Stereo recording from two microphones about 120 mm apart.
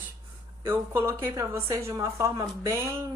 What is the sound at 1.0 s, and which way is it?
A woman's voice, 25° right (ahead or behind).